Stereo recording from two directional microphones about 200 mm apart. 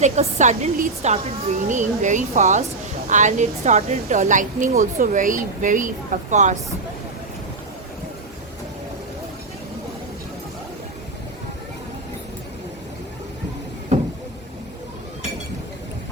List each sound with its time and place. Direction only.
0.0 s a woman's voice: 35° right (ahead or behind)